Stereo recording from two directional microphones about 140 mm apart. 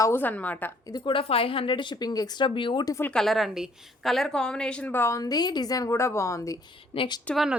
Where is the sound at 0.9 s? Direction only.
35° left (ahead or behind).